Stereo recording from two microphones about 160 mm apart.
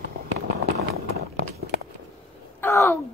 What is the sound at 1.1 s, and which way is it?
Run, 80° right.